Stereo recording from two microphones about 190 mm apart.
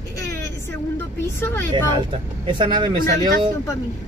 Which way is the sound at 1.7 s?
25° right (ahead or behind).